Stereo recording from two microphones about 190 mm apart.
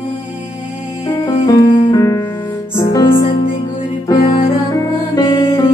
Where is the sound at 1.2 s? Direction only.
25° left (ahead or behind).